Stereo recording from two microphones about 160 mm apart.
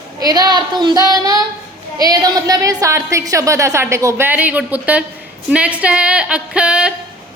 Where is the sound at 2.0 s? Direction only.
25° right (ahead or behind).